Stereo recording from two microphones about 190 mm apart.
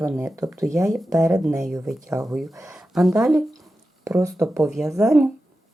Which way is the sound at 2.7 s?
5° right (ahead or behind).